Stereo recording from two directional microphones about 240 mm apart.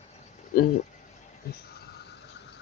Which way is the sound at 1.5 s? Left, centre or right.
Left.